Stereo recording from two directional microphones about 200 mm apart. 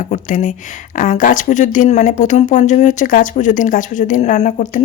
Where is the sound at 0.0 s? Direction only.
40° left (ahead or behind).